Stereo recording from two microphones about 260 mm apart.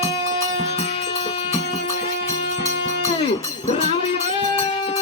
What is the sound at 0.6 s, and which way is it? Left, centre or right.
Music, left.